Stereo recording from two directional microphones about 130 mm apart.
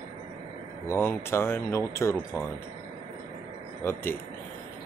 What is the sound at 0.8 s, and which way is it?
Speech, 20° left (ahead or behind).